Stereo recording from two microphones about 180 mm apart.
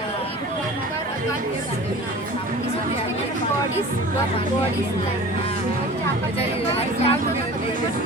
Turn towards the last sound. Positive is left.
turn(degrees=35)  # may be behind; listen again after turning